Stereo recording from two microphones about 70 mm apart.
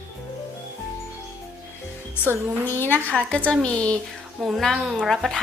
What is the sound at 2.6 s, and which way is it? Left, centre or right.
Speech, left.